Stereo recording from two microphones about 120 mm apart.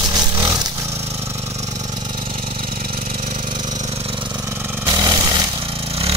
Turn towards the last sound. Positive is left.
turn(degrees=-35)  # may be behind; listen again after turning